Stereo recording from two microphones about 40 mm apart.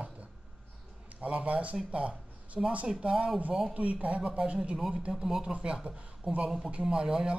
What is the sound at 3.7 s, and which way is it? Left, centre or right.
Speech, right.